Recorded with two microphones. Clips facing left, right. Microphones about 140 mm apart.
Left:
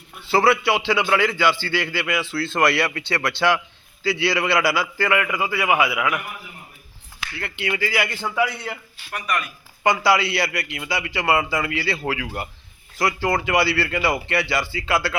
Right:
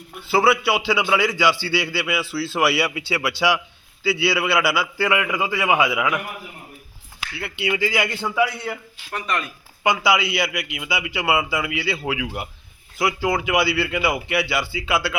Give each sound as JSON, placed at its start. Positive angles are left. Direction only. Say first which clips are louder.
{"t": 0.3, "sound": "a man's voice", "louder": "even", "side_deg": -5}
{"t": 7.3, "sound": "a man's voice", "louder": "right 2 dB", "side_deg": -10}
{"t": 9.8, "sound": "a man's voice", "louder": "left 1 dB", "side_deg": -5}